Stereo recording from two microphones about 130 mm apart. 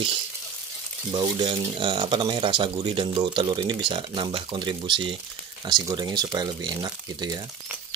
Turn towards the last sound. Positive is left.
turn(degrees=-30)  # may be behind; listen again after turning